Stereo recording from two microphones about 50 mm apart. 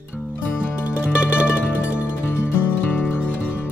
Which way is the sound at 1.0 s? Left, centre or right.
Right.